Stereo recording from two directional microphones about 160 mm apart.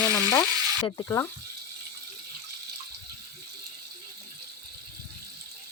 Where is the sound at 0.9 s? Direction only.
25° left (ahead or behind).